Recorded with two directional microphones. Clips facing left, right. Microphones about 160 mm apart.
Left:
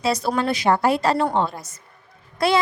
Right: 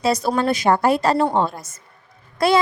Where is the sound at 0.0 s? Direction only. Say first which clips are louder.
Right 2 dB; 45° right (ahead or behind).